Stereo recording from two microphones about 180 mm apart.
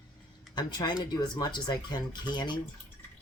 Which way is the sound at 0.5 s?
25° left (ahead or behind).